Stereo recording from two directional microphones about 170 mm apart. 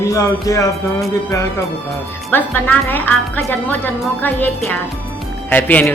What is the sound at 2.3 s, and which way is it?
Speech, 10° left (ahead or behind).